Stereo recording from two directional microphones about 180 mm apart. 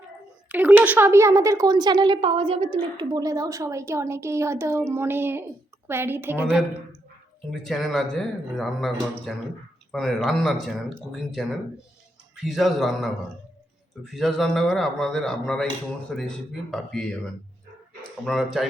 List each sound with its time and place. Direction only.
0.4 s speech: 10° right (ahead or behind); by 2.7 s 30° right (ahead or behind)
3.0 s a woman's voice: 20° right (ahead or behind)
7.5 s a man's voice: centre (ahead or behind)
12.5 s a man's voice: centre (ahead or behind)
18.3 s a man's voice: centre (ahead or behind)